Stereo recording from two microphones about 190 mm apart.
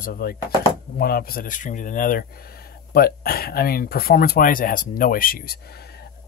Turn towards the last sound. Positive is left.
turn(degrees=55)  # may be behind; listen again after turning